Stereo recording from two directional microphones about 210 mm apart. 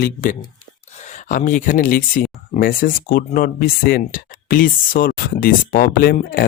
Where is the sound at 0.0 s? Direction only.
40° left (ahead or behind).